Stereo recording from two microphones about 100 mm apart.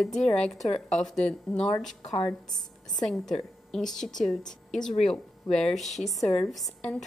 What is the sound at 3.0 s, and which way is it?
A woman's voice, centre (ahead or behind).